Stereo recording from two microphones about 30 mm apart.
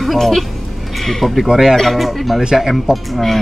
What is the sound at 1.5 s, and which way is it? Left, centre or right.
Speech, centre.